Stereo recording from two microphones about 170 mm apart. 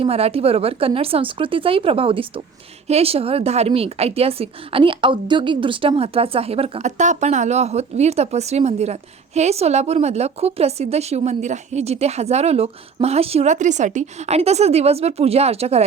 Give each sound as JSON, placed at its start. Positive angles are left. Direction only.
{"t": 0.0, "sound": "a woman's voice", "side_deg": -35}